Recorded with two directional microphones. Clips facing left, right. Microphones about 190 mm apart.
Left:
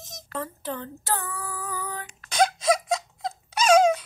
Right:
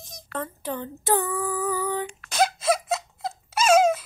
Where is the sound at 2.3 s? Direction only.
5° right (ahead or behind).